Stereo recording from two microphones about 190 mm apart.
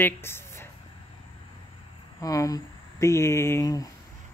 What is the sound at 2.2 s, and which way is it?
Speech, 20° left (ahead or behind).